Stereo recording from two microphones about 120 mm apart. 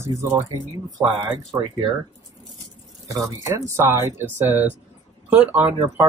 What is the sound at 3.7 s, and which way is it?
Speech, 20° right (ahead or behind).